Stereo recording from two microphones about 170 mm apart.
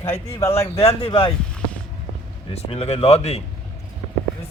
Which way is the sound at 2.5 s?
35° left (ahead or behind).